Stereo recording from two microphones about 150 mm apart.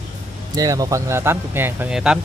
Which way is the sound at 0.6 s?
25° right (ahead or behind).